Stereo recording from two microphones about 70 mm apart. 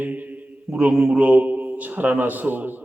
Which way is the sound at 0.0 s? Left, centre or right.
Right.